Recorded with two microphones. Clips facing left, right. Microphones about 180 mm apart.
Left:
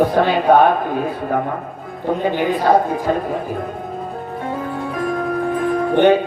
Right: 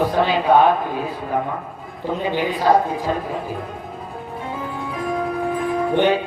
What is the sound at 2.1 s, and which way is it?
Speech, 55° left (ahead or behind).